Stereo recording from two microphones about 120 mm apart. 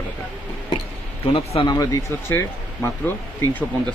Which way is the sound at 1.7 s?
30° left (ahead or behind).